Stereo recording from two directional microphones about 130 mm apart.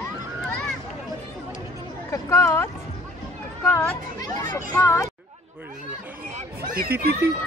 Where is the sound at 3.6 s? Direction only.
15° left (ahead or behind).